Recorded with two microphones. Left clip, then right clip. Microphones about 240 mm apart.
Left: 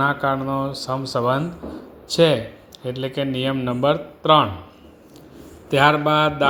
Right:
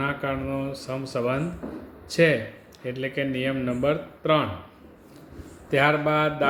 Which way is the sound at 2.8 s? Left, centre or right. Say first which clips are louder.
Left 3 dB; left.